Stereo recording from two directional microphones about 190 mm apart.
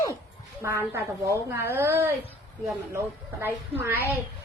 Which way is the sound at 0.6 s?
15° right (ahead or behind).